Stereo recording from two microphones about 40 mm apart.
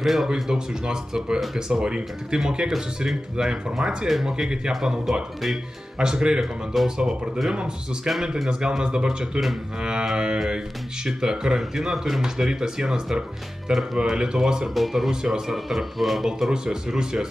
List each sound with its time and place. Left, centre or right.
0.0 s speech: centre
0.3 s speech: centre
4.1 s speech: centre
6.4 s speech: centre
7.5 s speech: right
14.7 s speech: centre
15.0 s speech: centre
15.5 s speech: centre
16.3 s speech: centre